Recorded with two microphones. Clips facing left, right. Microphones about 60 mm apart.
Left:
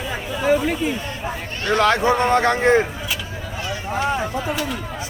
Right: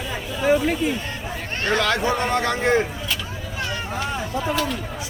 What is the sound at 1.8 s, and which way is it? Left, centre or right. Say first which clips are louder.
Speech: left 7 dB; left.